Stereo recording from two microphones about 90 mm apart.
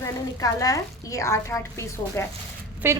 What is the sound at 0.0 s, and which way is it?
A woman's voice, 40° left (ahead or behind).